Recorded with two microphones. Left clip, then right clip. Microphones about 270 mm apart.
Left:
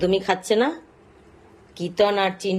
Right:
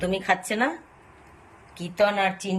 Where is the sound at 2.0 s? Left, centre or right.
Centre.